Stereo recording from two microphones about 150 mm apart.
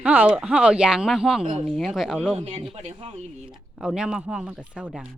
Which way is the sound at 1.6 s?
Centre (ahead or behind).